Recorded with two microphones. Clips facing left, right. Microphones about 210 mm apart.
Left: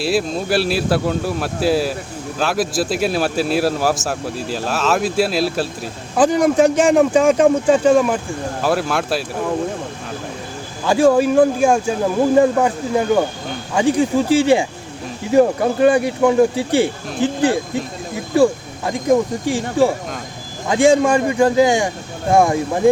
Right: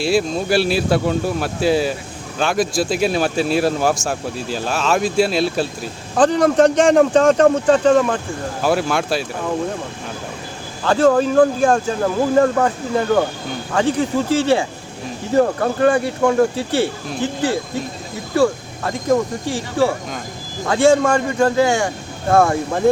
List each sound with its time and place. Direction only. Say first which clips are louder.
0.0 s speech: right 1 dB; centre (ahead or behind)
8.6 s speech: right 1 dB; centre (ahead or behind)
10.8 s speech: left 1 dB; 10° left (ahead or behind)
18.3 s speech: left 2 dB; 15° left (ahead or behind)
20.7 s speech: left 1 dB; 15° left (ahead or behind)